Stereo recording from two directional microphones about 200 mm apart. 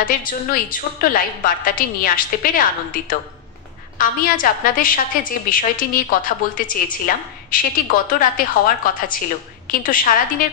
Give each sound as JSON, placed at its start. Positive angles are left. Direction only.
{"t": 0.0, "sound": "a woman's voice", "side_deg": 45}